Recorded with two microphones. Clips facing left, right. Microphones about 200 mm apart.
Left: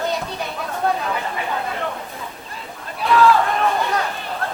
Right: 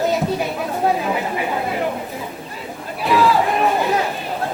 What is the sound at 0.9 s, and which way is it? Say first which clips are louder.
Chatter: right 2 dB; 15° right (ahead or behind).